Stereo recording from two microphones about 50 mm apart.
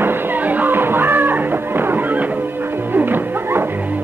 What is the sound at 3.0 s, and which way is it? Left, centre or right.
Music, right.